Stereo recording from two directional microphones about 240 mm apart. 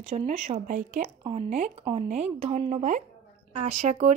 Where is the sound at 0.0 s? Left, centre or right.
Right.